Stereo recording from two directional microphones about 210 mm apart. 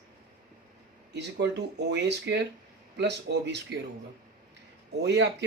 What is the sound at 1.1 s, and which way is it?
Speech, 55° right (ahead or behind).